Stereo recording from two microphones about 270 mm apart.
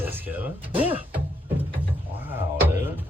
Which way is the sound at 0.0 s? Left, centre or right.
Centre.